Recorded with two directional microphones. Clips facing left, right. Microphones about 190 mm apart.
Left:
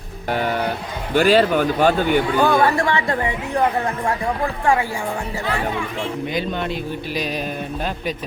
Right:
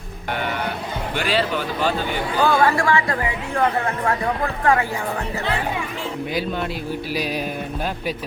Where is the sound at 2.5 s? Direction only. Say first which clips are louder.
Left 1 dB; 20° left (ahead or behind).